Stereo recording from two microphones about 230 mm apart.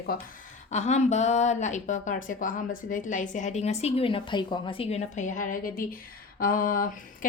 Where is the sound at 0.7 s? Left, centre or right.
Left.